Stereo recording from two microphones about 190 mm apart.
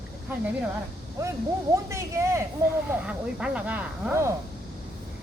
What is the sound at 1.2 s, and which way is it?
Speech, 15° right (ahead or behind).